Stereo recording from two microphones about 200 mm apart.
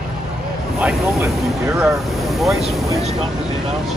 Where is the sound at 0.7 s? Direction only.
10° right (ahead or behind).